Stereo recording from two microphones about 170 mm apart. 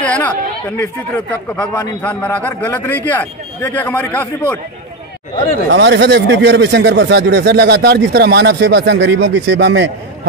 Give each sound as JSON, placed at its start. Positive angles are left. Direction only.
{"t": 0.0, "sound": "chatter", "side_deg": 5}
{"t": 0.7, "sound": "speech", "side_deg": 10}
{"t": 5.7, "sound": "speech", "side_deg": -90}